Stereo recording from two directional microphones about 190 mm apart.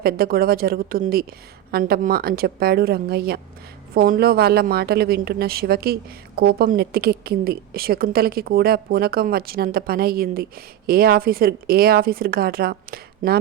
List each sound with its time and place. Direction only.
0.0 s speech: 50° right (ahead or behind)